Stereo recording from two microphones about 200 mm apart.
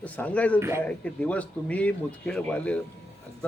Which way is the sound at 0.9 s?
5° left (ahead or behind).